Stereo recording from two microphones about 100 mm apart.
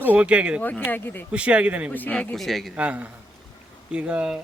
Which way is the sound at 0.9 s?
20° left (ahead or behind).